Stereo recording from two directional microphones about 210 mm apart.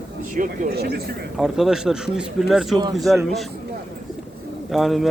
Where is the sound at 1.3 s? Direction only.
Centre (ahead or behind).